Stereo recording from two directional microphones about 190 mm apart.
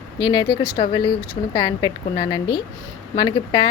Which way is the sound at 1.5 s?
25° left (ahead or behind).